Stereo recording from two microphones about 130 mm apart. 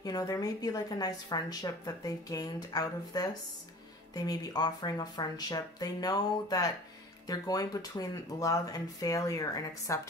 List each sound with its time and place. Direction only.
0.0 s a woman's voice: 30° left (ahead or behind)